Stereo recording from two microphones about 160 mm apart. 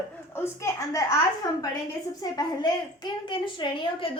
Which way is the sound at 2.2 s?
25° left (ahead or behind).